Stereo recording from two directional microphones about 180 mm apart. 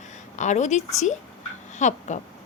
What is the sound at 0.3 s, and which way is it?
Speech, 40° left (ahead or behind).